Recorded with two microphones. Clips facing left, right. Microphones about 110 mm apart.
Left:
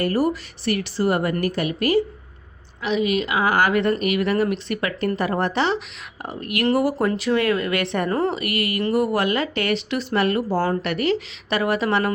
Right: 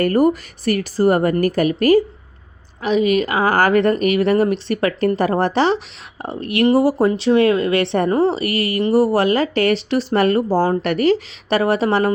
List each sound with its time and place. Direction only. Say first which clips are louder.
0.0 s speech: right 6 dB; 50° right (ahead or behind); by 12.1 s 35° right (ahead or behind)